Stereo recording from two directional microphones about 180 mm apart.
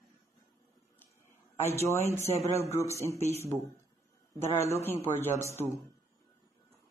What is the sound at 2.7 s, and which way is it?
Speech, 15° left (ahead or behind).